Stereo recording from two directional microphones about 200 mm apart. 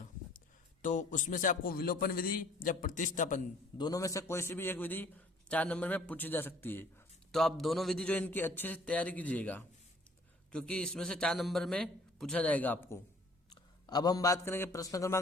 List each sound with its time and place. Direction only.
0.8 s a man's voice: 40° left (ahead or behind)
3.8 s a man's voice: 20° left (ahead or behind)